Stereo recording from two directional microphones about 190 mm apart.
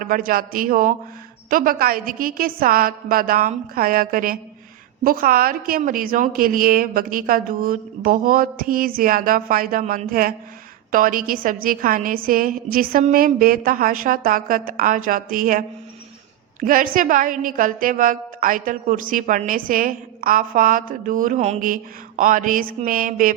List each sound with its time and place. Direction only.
0.0 s a woman's voice: 50° right (ahead or behind)